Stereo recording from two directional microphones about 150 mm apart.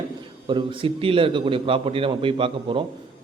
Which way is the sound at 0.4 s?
35° right (ahead or behind).